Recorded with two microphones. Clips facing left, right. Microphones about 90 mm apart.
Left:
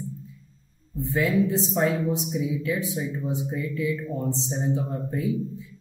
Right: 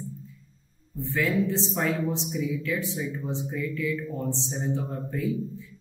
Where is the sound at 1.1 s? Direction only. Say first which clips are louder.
Left 3 dB; 15° left (ahead or behind).